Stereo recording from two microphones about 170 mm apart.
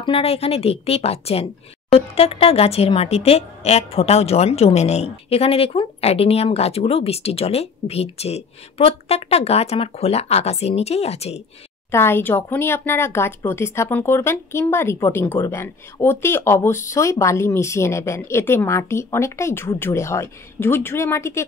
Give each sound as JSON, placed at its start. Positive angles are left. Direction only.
{"t": 0.0, "sound": "speech", "side_deg": 35}
{"t": 11.9, "sound": "speech", "side_deg": 15}